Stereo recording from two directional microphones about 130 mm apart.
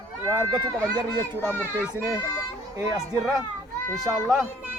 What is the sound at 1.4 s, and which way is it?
Speech, 15° left (ahead or behind).